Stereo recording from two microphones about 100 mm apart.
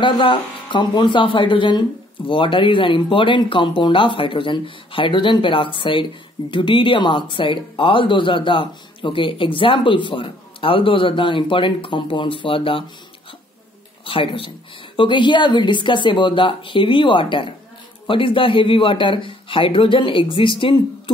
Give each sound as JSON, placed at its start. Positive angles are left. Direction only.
{"t": 0.0, "sound": "speech", "side_deg": 55}
{"t": 14.0, "sound": "speech", "side_deg": 65}
{"t": 15.0, "sound": "speech", "side_deg": 55}